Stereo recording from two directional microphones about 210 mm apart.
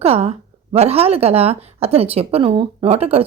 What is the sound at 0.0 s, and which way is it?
A woman's voice, 30° right (ahead or behind).